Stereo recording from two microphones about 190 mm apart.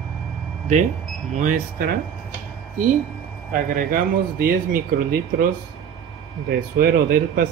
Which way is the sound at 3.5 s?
50° right (ahead or behind).